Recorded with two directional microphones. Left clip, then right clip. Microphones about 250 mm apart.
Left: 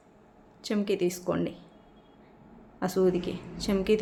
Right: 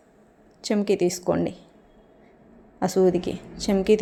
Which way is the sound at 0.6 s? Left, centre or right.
Right.